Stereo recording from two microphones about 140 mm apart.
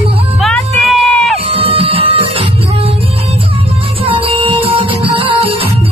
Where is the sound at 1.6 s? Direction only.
40° right (ahead or behind).